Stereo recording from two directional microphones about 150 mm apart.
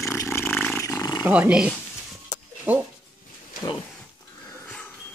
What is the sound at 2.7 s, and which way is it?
Dog, 10° right (ahead or behind).